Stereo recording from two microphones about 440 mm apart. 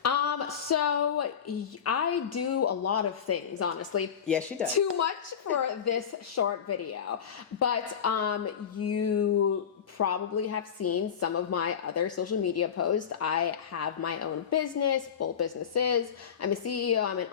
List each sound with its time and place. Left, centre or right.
0.0 s a sound: left
1.8 s a woman's voice: left
4.3 s speech: centre
5.6 s a woman's voice: left